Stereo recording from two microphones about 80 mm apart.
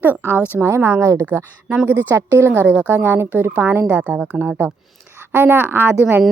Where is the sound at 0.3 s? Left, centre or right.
Centre.